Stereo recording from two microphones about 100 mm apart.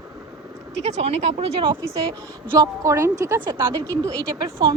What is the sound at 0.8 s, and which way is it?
Speech, 90° right.